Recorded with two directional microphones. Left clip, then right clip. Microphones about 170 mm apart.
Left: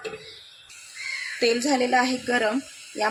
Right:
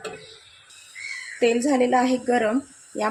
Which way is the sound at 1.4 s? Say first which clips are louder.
Right 2 dB; 20° right (ahead or behind).